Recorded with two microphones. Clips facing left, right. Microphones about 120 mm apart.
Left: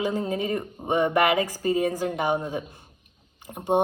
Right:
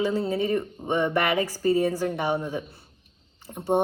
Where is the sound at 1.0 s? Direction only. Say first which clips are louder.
Left 4 dB; 45° left (ahead or behind).